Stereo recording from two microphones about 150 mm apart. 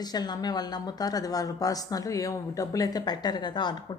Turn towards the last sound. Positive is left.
turn(degrees=30)  # may be behind; listen again after turning